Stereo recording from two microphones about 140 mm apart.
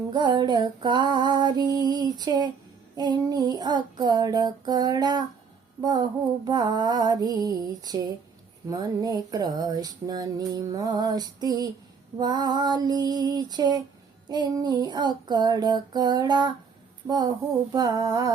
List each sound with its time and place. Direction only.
0.1 s female singing: 30° right (ahead or behind)
2.9 s music: 30° right (ahead or behind)
14.3 s female singing: 30° right (ahead or behind)
17.1 s music: 30° right (ahead or behind)